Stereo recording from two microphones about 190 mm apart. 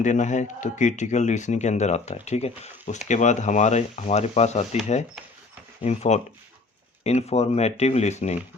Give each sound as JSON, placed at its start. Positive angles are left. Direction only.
{"t": 0.0, "sound": "a man's voice", "side_deg": 40}
{"t": 5.8, "sound": "a man's voice", "side_deg": 35}